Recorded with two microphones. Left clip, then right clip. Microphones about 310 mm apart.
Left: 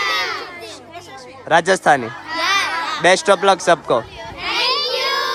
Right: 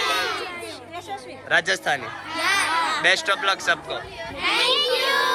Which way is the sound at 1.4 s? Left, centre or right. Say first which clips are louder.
Left 8 dB; left.